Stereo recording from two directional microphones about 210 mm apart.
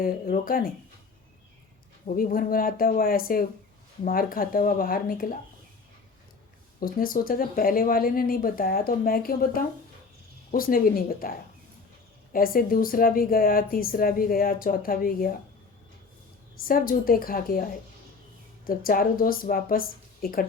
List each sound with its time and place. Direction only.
0.0 s speech: 45° left (ahead or behind)
2.0 s speech: 40° left (ahead or behind)
6.7 s speech: 40° left (ahead or behind)
16.6 s speech: 45° left (ahead or behind)